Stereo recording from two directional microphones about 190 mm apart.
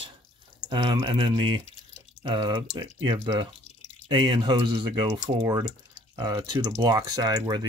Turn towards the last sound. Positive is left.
turn(degrees=-20)  # may be behind; listen again after turning